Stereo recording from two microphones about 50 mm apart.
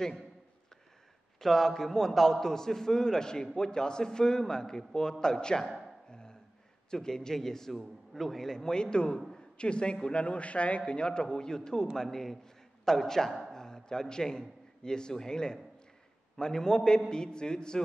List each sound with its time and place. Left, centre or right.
1.4 s a man's voice: centre
6.0 s a sound: centre
6.9 s a man's voice: centre